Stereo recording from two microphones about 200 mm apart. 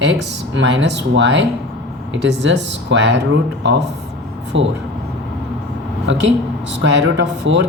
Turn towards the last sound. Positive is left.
turn(degrees=-65)  # may be behind; listen again after turning